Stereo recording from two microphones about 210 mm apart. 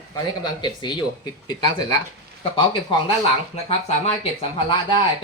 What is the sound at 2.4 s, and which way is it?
Speech, 25° left (ahead or behind).